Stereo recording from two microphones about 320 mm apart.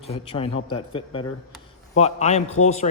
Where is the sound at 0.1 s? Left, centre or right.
Centre.